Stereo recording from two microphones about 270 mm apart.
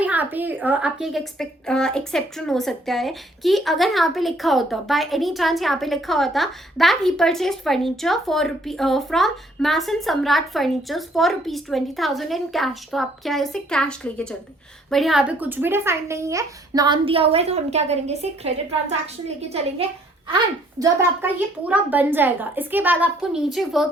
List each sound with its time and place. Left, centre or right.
0.0 s speech: centre; by 18.5 s right
19.5 s a woman's voice: right
20.3 s speech: centre